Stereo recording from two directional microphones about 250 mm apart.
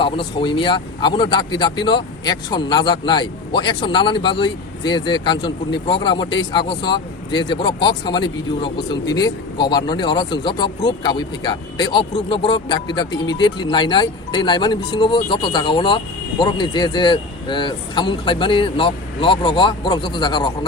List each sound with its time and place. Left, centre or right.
0.0 s a man's voice: centre